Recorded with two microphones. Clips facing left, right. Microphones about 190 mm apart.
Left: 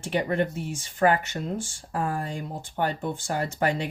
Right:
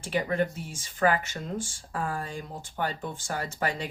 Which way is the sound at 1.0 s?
35° left (ahead or behind).